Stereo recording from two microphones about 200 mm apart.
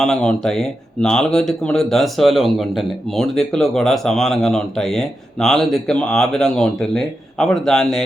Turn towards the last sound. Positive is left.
turn(degrees=5)  # may be behind; listen again after turning